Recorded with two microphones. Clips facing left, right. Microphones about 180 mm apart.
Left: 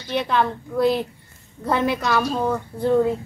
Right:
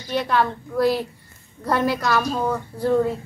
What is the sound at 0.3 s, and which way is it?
A woman's voice, 5° right (ahead or behind).